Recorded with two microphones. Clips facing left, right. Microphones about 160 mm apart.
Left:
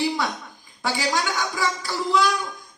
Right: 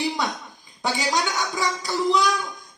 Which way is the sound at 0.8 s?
20° right (ahead or behind).